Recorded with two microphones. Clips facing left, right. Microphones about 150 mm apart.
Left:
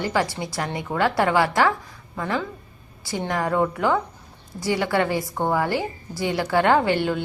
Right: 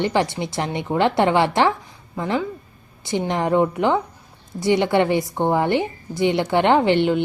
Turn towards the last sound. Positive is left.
turn(degrees=-20)  # may be behind; listen again after turning